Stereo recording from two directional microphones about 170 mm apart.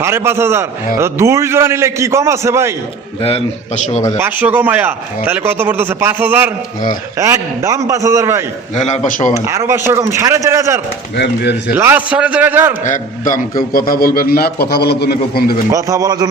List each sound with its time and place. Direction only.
0.0 s a man's voice: 15° right (ahead or behind)
3.2 s a man's voice: 35° left (ahead or behind)
4.2 s a man's voice: 10° right (ahead or behind)
8.7 s speech: 45° left (ahead or behind)
9.4 s a man's voice: 15° right (ahead or behind)
12.8 s a man's voice: 50° left (ahead or behind)
15.7 s speech: 20° right (ahead or behind)